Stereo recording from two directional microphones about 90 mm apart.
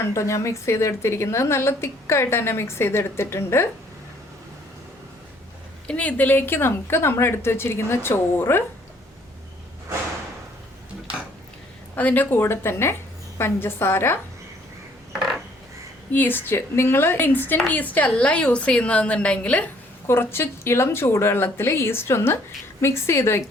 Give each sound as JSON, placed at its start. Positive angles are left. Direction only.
{"t": 0.0, "sound": "a woman's voice", "side_deg": 30}
{"t": 5.9, "sound": "a woman's voice", "side_deg": 15}
{"t": 11.9, "sound": "a woman's voice", "side_deg": 20}
{"t": 16.1, "sound": "a woman's voice", "side_deg": 25}
{"t": 20.1, "sound": "a woman's voice", "side_deg": 25}